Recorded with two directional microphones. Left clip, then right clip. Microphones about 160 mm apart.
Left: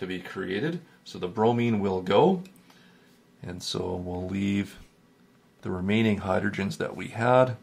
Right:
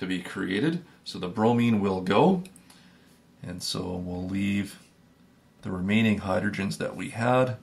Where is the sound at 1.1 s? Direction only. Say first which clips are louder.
Left 1 dB; 40° left (ahead or behind).